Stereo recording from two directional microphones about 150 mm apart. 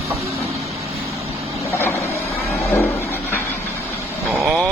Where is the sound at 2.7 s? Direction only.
15° left (ahead or behind).